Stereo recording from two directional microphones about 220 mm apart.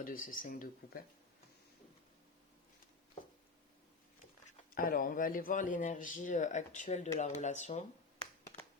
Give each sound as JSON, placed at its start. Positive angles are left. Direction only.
{"t": 0.0, "sound": "speech", "side_deg": 40}
{"t": 4.4, "sound": "speech", "side_deg": 35}